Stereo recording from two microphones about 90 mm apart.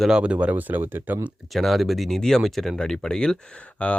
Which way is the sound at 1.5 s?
Centre (ahead or behind).